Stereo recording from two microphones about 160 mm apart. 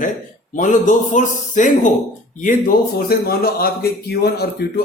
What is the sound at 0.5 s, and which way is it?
Speech, 50° left (ahead or behind).